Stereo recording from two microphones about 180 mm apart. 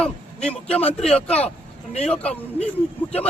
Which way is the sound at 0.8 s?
35° left (ahead or behind).